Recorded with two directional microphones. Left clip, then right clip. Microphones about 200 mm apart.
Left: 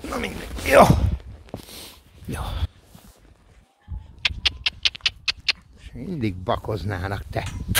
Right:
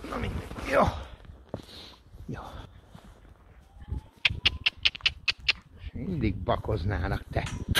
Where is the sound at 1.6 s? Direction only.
35° left (ahead or behind).